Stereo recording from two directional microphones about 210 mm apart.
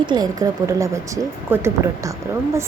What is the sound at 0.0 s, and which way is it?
A woman's voice, 20° right (ahead or behind).